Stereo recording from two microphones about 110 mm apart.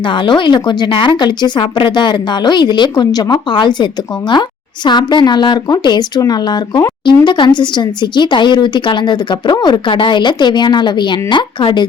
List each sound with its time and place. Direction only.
0.3 s a woman's voice: 45° left (ahead or behind)
4.9 s a woman's voice: 40° left (ahead or behind)